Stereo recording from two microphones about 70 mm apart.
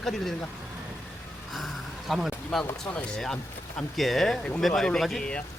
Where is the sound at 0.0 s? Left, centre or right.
Centre.